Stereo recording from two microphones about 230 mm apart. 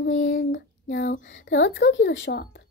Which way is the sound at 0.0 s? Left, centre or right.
Left.